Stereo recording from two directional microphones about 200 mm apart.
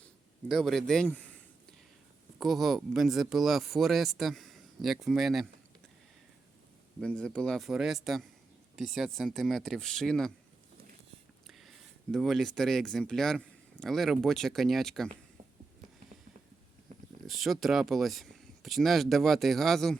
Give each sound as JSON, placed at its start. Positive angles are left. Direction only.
{"t": 0.0, "sound": "speech", "side_deg": 0}
{"t": 2.4, "sound": "speech", "side_deg": 0}
{"t": 7.0, "sound": "speech", "side_deg": 5}
{"t": 11.4, "sound": "speech", "side_deg": 0}
{"t": 16.9, "sound": "a sound", "side_deg": -35}
{"t": 17.2, "sound": "speech", "side_deg": 0}